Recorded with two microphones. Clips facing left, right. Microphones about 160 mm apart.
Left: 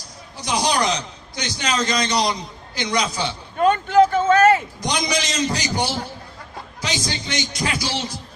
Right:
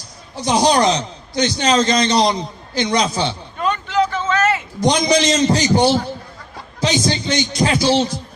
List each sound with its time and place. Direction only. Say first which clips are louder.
0.4 s speech: right 6 dB; 25° right (ahead or behind)
3.6 s a sound: left 4 dB; 50° left (ahead or behind)
4.8 s speech: right 8 dB; 25° right (ahead or behind)